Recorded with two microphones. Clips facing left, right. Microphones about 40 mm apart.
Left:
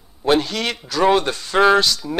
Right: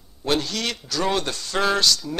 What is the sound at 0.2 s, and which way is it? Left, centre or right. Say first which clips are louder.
A man's voice: left 6 dB; centre.